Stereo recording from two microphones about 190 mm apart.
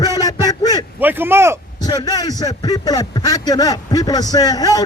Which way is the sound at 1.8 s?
20° left (ahead or behind).